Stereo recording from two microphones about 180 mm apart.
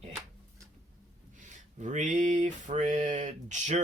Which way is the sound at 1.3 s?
45° right (ahead or behind).